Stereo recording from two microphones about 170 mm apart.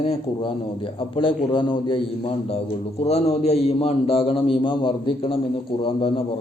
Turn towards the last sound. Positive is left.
turn(degrees=30)  # may be behind; listen again after turning